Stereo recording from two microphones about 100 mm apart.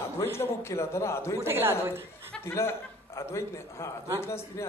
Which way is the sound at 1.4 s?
25° right (ahead or behind).